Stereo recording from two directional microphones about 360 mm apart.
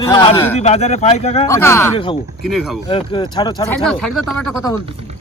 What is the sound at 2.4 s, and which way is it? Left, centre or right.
Speech, centre.